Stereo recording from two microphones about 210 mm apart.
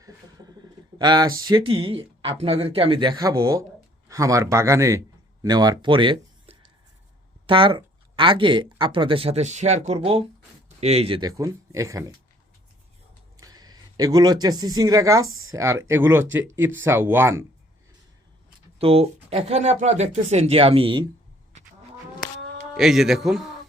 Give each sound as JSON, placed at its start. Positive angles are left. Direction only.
{"t": 0.9, "sound": "speech", "side_deg": -20}
{"t": 13.4, "sound": "speech", "side_deg": -20}
{"t": 15.2, "sound": "speech", "side_deg": -75}
{"t": 15.5, "sound": "speech", "side_deg": -15}
{"t": 18.8, "sound": "speech", "side_deg": -25}
{"t": 22.7, "sound": "speech", "side_deg": 0}